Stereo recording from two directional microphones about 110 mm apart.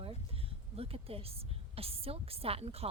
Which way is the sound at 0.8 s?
60° right (ahead or behind).